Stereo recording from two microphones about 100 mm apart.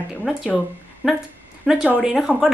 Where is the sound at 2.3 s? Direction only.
10° left (ahead or behind).